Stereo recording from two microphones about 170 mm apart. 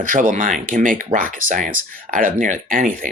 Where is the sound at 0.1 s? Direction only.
50° right (ahead or behind).